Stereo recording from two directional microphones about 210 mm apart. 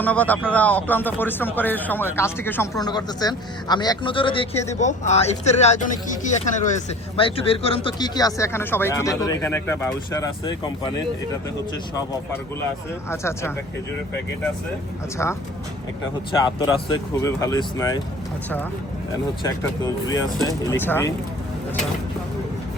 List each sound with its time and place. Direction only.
0.0 s a man's voice: 5° left (ahead or behind); by 6.8 s 35° left (ahead or behind)
7.2 s speech: 25° left (ahead or behind)
13.1 s speech: 10° left (ahead or behind)
15.2 s speech: 10° left (ahead or behind)
16.6 s speech: 20° left (ahead or behind)
19.4 s speech: 20° left (ahead or behind)